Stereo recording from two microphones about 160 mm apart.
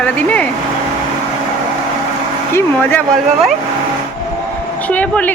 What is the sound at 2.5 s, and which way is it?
Speech, 10° left (ahead or behind).